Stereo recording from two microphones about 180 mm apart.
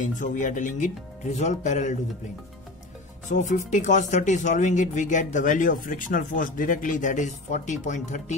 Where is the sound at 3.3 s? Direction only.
45° left (ahead or behind).